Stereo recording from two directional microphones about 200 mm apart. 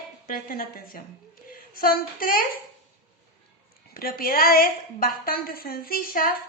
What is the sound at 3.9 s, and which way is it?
A woman's voice, 45° left (ahead or behind).